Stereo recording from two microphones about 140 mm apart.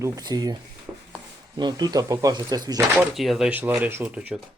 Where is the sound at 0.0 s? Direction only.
25° right (ahead or behind).